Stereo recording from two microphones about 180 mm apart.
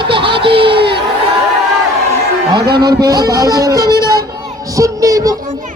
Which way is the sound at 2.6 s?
65° right (ahead or behind).